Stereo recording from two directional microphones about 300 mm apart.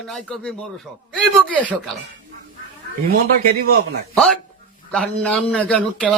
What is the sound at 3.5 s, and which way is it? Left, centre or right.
Speech, right.